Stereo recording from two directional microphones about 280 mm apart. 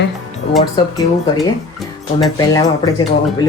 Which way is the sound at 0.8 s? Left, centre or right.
Centre.